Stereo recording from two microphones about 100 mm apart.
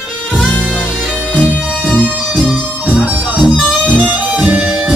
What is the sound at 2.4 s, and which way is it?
Music, 10° right (ahead or behind).